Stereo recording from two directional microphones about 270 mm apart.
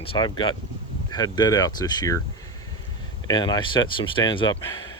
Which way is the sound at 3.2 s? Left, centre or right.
Centre.